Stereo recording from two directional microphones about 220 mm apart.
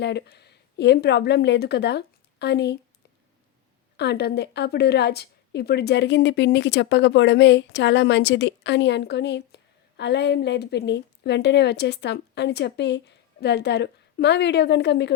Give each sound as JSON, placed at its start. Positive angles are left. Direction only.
{"t": 0.0, "sound": "a woman's voice", "side_deg": 50}
{"t": 3.9, "sound": "a woman's voice", "side_deg": 50}